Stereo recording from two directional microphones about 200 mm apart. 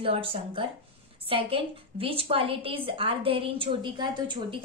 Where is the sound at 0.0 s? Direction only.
30° right (ahead or behind).